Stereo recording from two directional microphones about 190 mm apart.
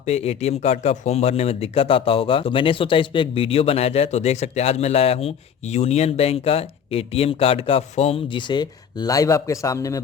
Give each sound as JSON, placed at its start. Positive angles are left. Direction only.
{"t": 0.0, "sound": "speech", "side_deg": 35}